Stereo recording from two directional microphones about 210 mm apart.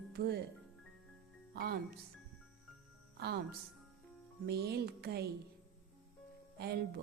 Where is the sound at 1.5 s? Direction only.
45° right (ahead or behind).